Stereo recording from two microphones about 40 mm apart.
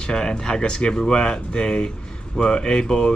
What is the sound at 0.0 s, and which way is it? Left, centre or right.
Speech, centre.